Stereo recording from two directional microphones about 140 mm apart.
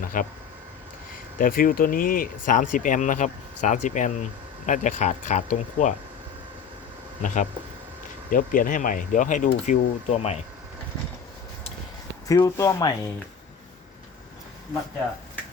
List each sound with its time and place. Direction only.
0.0 s speech: 75° left (ahead or behind)
1.4 s speech: 90° left; by 5.9 s 65° left (ahead or behind)
7.2 s speech: 65° left (ahead or behind); by 10.4 s 50° left (ahead or behind)
12.3 s speech: 25° left (ahead or behind)